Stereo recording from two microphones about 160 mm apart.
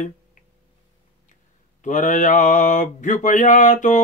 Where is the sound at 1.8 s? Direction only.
50° left (ahead or behind).